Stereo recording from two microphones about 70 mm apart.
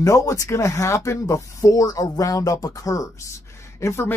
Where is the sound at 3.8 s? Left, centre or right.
Left.